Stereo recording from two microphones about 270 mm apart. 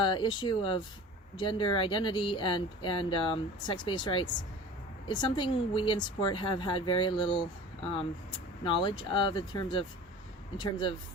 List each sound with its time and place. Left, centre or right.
0.0 s speech: centre
8.6 s speech: centre